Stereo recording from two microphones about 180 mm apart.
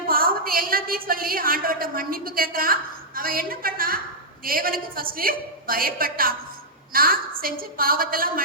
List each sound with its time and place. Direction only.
0.1 s a woman's voice: 55° right (ahead or behind)